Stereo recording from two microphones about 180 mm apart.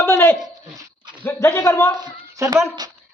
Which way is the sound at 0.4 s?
20° right (ahead or behind).